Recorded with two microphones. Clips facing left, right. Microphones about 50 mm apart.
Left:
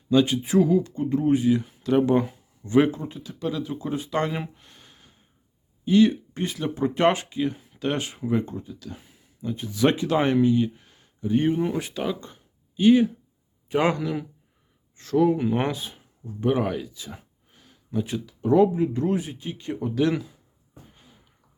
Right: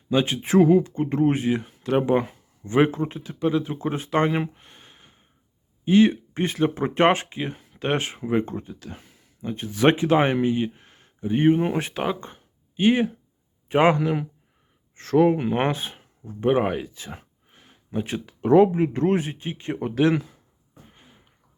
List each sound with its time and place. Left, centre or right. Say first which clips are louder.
0.1 s speech: left 2 dB; right
0.4 s speech: right 3 dB; right
2.9 s speech: right 6 dB; right
4.3 s a sound: right 6 dB; right
5.8 s a man's voice: right 1 dB; right
14.9 s speech: right 2 dB; right
20.9 s a sound: right 1 dB; right